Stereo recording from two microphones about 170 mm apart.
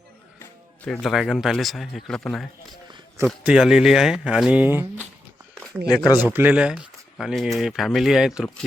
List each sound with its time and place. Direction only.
0.9 s speech: centre (ahead or behind)
5.7 s speech: 5° left (ahead or behind)
6.3 s speech: 10° right (ahead or behind)